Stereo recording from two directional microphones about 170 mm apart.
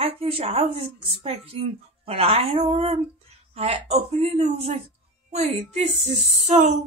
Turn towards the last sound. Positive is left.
turn(degrees=-45)  # may be behind; listen again after turning